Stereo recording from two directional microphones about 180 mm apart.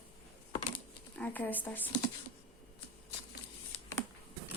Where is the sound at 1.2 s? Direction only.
10° left (ahead or behind).